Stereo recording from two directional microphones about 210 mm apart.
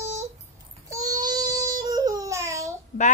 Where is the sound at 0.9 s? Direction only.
15° right (ahead or behind).